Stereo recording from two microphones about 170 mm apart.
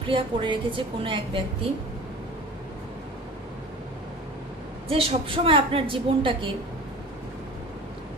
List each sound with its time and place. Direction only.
0.0 s a woman's voice: 30° right (ahead or behind)
4.8 s a woman's voice: 35° right (ahead or behind)